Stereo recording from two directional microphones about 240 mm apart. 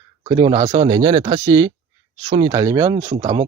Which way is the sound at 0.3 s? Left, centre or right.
Centre.